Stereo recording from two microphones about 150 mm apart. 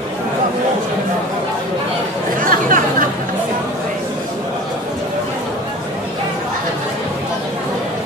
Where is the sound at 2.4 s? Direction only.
65° right (ahead or behind).